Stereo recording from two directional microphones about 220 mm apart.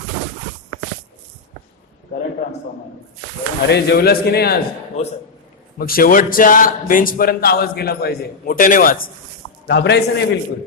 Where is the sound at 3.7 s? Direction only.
45° left (ahead or behind).